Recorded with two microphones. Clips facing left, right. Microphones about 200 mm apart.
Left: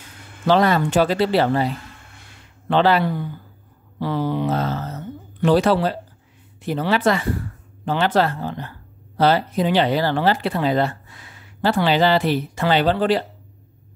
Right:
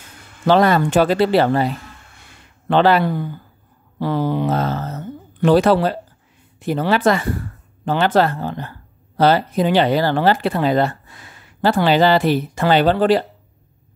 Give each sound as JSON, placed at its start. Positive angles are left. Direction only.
{"t": 0.5, "sound": "speech", "side_deg": -50}
{"t": 2.7, "sound": "speech", "side_deg": -50}